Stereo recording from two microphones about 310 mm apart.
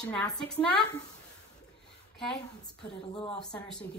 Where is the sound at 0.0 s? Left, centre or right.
Centre.